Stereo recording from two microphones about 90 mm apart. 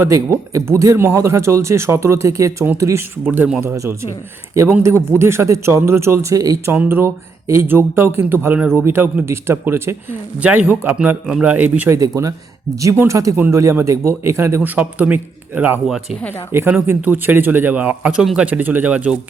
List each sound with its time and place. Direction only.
0.1 s speech: 35° right (ahead or behind)
3.2 s speech: 20° right (ahead or behind); by 6.6 s 40° right (ahead or behind)
6.8 s speech: 25° right (ahead or behind)
10.4 s a man's voice: 20° right (ahead or behind)
11.9 s speech: 45° right (ahead or behind)
12.9 s speech: 30° right (ahead or behind)
14.8 s a man's voice: 20° right (ahead or behind)